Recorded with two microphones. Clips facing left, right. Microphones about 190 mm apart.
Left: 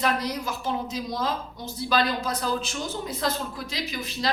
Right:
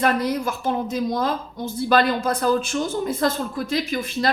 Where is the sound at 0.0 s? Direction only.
55° right (ahead or behind).